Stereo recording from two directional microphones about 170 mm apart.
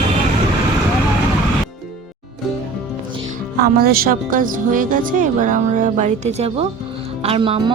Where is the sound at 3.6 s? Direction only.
60° right (ahead or behind); by 7.6 s 35° right (ahead or behind).